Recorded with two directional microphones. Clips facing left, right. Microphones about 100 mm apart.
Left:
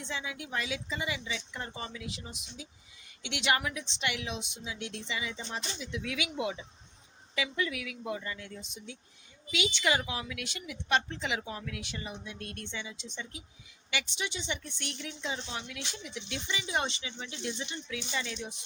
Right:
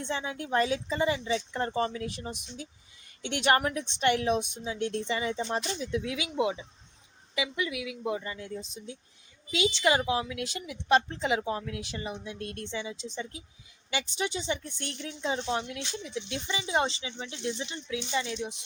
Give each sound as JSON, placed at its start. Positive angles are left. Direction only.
{"t": 0.0, "sound": "a woman's voice", "side_deg": -45}
{"t": 6.0, "sound": "a woman's voice", "side_deg": -30}